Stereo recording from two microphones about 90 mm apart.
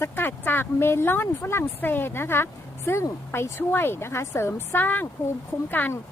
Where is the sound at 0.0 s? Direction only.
25° left (ahead or behind).